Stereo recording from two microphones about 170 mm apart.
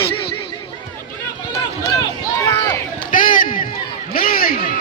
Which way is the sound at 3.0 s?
50° left (ahead or behind).